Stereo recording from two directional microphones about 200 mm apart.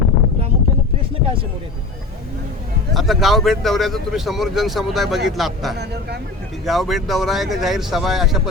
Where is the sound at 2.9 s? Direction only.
Centre (ahead or behind).